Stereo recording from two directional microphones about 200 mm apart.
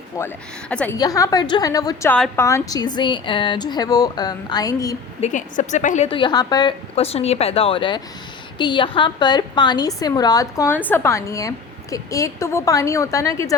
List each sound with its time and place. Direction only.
0.1 s a woman's voice: 15° left (ahead or behind)
0.9 s a woman's voice: 15° left (ahead or behind)
5.2 s a woman's voice: 40° left (ahead or behind); by 13.6 s 15° left (ahead or behind)